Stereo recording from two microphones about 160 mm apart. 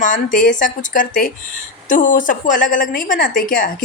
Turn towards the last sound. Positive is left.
turn(degrees=55)  # may be behind; listen again after turning